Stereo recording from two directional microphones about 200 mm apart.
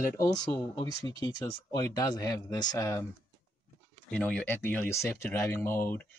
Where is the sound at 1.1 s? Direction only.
15° left (ahead or behind).